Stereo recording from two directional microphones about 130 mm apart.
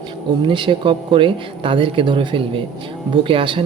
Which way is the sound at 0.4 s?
40° right (ahead or behind).